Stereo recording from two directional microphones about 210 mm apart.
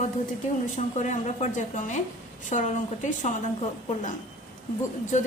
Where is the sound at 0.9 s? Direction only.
35° left (ahead or behind).